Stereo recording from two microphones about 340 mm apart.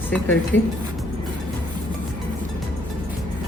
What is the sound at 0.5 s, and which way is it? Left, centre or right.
Speech, left.